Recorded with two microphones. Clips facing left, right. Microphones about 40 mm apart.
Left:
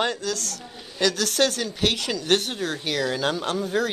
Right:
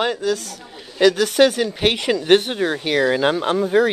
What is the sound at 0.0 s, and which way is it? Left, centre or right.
Speech, centre.